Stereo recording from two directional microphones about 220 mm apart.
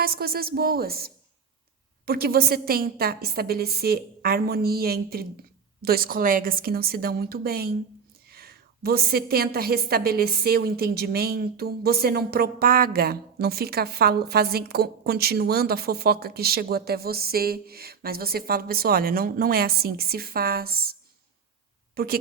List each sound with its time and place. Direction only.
0.0 s a woman's voice: 45° right (ahead or behind)
21.9 s a woman's voice: 45° right (ahead or behind)